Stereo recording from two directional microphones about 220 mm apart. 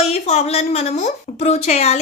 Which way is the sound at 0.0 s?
30° left (ahead or behind).